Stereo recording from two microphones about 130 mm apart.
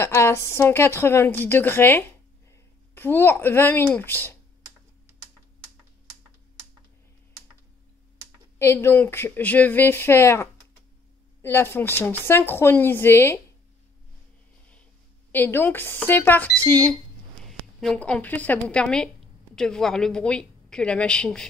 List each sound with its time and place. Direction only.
0.0 s a woman's voice: 20° left (ahead or behind)
8.5 s a woman's voice: 20° left (ahead or behind)
15.3 s a woman's voice: 15° left (ahead or behind)
17.5 s a sound: centre (ahead or behind)
17.9 s a woman's voice: 10° left (ahead or behind)